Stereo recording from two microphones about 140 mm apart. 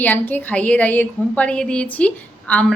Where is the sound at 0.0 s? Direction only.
15° left (ahead or behind).